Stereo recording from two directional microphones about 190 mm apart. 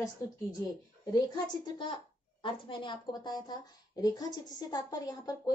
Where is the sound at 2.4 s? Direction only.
25° left (ahead or behind).